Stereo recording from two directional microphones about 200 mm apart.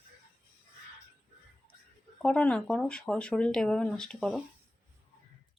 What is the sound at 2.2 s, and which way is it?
Speech, 5° left (ahead or behind).